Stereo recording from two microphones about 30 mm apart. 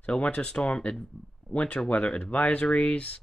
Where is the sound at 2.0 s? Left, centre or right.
Left.